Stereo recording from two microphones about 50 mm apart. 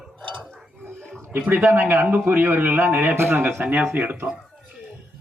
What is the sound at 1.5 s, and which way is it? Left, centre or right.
A man's voice, right.